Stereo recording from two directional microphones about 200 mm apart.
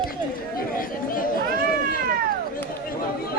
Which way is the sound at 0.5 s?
45° left (ahead or behind).